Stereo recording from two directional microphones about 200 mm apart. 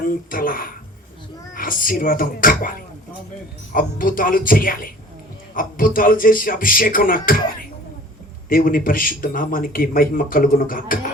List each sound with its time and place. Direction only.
0.0 s a man's voice: 45° left (ahead or behind)